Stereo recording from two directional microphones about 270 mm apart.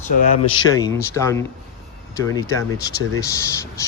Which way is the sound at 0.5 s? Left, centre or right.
Centre.